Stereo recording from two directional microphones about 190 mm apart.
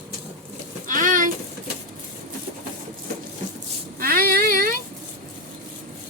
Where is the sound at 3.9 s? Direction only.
50° right (ahead or behind).